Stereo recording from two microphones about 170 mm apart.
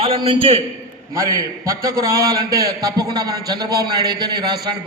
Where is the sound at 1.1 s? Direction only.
20° right (ahead or behind).